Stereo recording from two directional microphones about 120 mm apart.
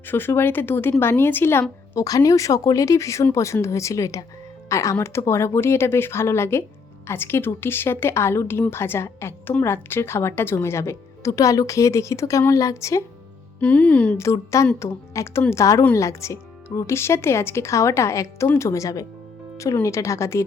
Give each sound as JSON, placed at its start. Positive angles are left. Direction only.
{"t": 0.1, "sound": "a woman's voice", "side_deg": 20}
{"t": 2.0, "sound": "a woman's voice", "side_deg": 30}
{"t": 13.6, "sound": "a woman's voice", "side_deg": 10}
{"t": 14.3, "sound": "a woman's voice", "side_deg": 25}